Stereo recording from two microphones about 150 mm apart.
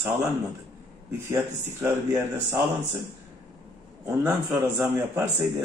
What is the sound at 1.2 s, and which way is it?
Speech, 15° right (ahead or behind).